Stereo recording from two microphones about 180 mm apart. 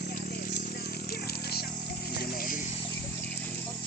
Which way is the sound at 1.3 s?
60° left (ahead or behind).